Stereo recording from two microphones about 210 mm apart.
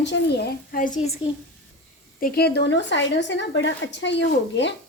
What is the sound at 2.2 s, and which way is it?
A woman's voice, 50° left (ahead or behind).